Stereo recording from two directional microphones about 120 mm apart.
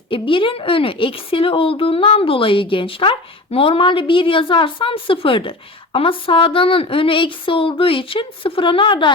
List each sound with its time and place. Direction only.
0.1 s a woman's voice: 45° left (ahead or behind)